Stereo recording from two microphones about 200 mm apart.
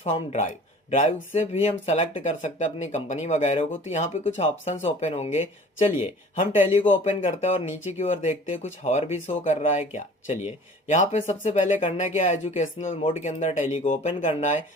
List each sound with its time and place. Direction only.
0.0 s speech: 35° left (ahead or behind)